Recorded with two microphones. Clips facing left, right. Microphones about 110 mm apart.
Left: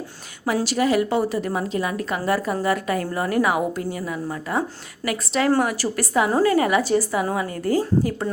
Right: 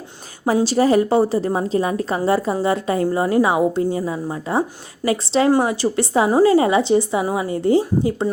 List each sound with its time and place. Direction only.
0.4 s a woman's voice: 30° right (ahead or behind)